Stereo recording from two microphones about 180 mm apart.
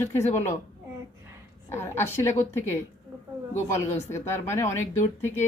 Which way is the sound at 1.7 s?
15° left (ahead or behind).